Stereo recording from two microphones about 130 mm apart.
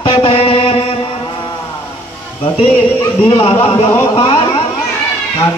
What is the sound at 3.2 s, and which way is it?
A man's voice, 45° left (ahead or behind).